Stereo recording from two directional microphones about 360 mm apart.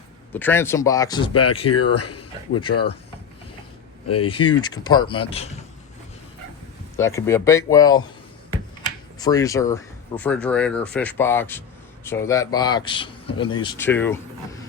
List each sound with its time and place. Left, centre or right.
0.3 s a man's voice: centre
1.3 s speech: left
4.1 s speech: left
4.4 s a man's voice: centre
6.9 s a man's voice: centre
9.2 s a man's voice: centre